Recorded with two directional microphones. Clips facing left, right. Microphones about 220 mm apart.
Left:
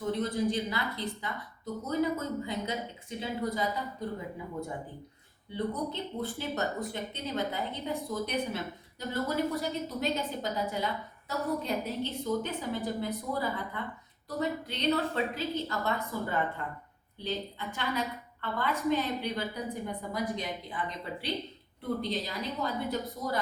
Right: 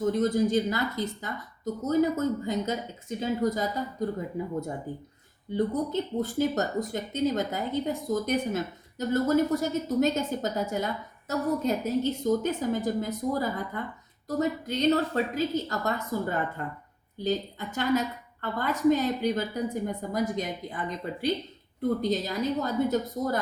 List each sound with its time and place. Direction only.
0.0 s a woman's voice: 45° right (ahead or behind)
5.5 s a woman's voice: 45° right (ahead or behind)